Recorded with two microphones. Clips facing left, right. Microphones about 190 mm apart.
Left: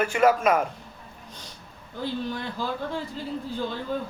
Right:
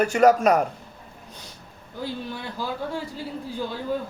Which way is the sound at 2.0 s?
10° right (ahead or behind).